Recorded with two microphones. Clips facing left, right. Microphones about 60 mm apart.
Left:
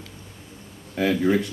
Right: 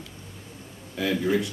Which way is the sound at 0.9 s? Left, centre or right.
Left.